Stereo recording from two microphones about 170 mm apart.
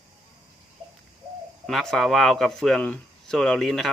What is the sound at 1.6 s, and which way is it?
Speech, centre (ahead or behind).